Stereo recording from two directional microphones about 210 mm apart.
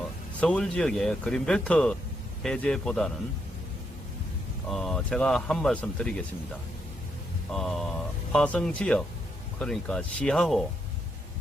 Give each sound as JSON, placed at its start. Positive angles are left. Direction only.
{"t": 0.3, "sound": "speech", "side_deg": 5}
{"t": 4.7, "sound": "speech", "side_deg": 5}
{"t": 7.5, "sound": "speech", "side_deg": 0}